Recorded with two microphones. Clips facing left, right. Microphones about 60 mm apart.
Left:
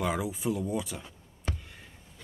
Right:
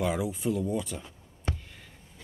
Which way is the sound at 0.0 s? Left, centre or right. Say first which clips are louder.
Right 1 dB; centre.